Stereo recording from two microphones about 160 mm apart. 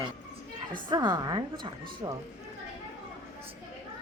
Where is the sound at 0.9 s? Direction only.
25° right (ahead or behind).